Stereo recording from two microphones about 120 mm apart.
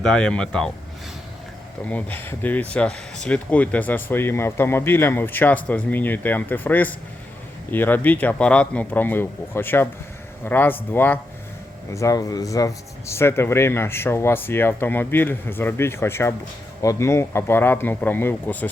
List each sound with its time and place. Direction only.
0.0 s speech: 5° left (ahead or behind)
1.9 s speech: 15° left (ahead or behind)
11.9 s speech: 30° left (ahead or behind)